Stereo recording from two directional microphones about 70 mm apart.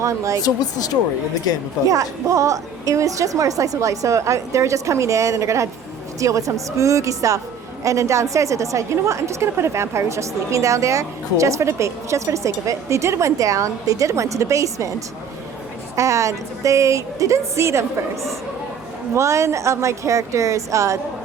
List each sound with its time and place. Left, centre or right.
0.0 s a woman's voice: right
0.4 s speech: left
1.9 s a woman's voice: right